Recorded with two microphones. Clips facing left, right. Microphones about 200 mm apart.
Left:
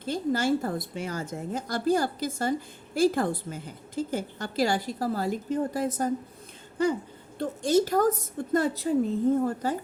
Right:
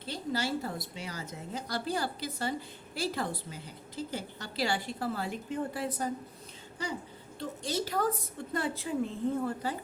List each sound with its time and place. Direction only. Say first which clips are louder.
0.0 s a woman's voice: left 7 dB; 50° left (ahead or behind)